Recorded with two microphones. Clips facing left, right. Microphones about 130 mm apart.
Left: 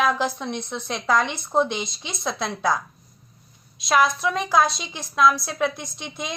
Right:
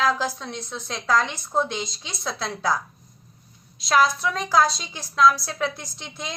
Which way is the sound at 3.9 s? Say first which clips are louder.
Even; 20° left (ahead or behind).